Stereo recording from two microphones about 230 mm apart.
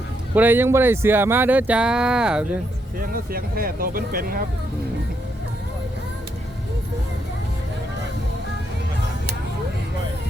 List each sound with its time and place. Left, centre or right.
0.3 s speech: centre
3.1 s speech: right